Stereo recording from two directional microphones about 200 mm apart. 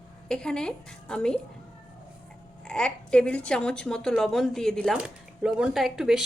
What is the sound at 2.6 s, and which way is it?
A woman's voice, 5° left (ahead or behind).